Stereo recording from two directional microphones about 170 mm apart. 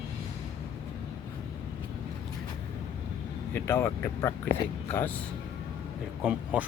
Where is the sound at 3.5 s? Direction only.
15° left (ahead or behind).